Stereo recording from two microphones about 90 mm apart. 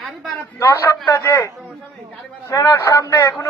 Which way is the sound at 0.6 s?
25° left (ahead or behind).